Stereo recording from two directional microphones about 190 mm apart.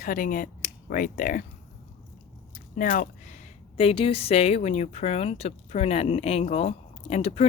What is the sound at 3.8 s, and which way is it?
Speech, 30° left (ahead or behind).